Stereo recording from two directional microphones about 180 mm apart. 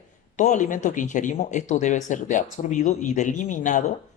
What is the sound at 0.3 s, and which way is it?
Speech, 45° left (ahead or behind).